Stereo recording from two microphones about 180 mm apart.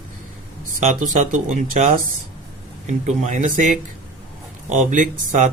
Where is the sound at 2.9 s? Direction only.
40° right (ahead or behind).